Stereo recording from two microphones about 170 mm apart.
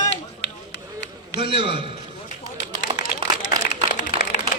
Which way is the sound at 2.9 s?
35° right (ahead or behind).